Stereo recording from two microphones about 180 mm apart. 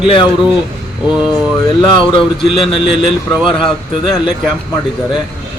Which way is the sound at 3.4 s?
30° left (ahead or behind).